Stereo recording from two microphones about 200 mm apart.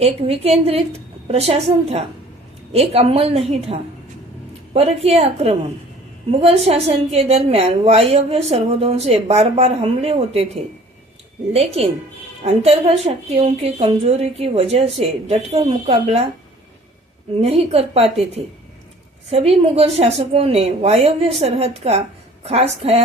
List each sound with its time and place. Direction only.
0.0 s a woman's voice: 30° right (ahead or behind)
17.3 s a woman's voice: 30° right (ahead or behind)